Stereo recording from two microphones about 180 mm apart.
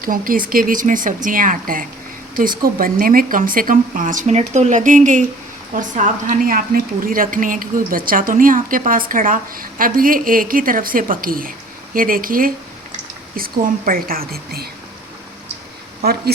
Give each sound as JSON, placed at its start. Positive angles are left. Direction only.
{"t": 0.0, "sound": "a woman's voice", "side_deg": -50}